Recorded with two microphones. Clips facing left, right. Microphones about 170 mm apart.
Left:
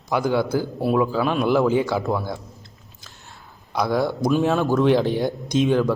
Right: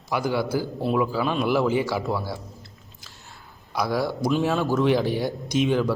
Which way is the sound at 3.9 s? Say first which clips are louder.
Left 3 dB; 20° left (ahead or behind).